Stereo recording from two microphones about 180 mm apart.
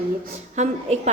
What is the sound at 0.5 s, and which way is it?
Speech, 40° right (ahead or behind).